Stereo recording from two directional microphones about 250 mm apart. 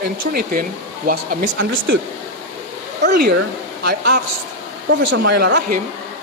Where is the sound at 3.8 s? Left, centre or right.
Right.